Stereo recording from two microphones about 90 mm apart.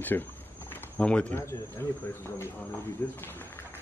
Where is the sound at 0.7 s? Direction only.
20° left (ahead or behind).